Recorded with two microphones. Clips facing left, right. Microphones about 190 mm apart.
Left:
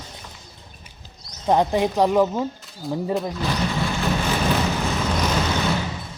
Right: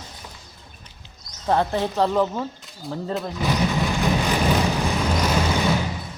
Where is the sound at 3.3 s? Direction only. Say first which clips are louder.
Right 2 dB; 15° right (ahead or behind).